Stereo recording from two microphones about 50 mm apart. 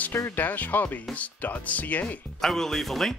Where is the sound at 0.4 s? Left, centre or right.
Left.